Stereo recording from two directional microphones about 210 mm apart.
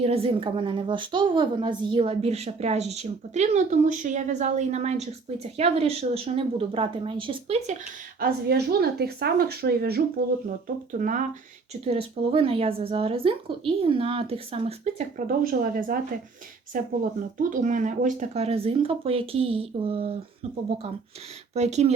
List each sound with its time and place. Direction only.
0.0 s a woman's voice: 30° right (ahead or behind)
8.2 s a woman's voice: 50° right (ahead or behind)
11.7 s speech: 30° right (ahead or behind)
15.4 s a woman's voice: 40° right (ahead or behind); by 20.1 s 25° right (ahead or behind)
21.5 s a woman's voice: 30° right (ahead or behind)